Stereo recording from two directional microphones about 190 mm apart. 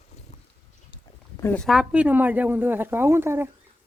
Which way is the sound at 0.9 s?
15° left (ahead or behind).